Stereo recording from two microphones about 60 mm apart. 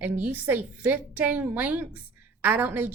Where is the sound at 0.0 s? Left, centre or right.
Right.